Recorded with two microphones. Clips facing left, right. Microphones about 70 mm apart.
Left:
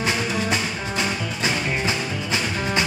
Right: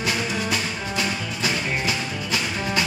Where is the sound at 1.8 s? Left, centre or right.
Left.